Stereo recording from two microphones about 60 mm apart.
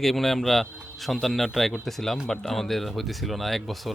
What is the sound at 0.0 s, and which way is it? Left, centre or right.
Speech, centre.